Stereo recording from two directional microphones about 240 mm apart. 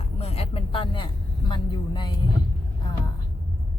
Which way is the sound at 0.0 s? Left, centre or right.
Left.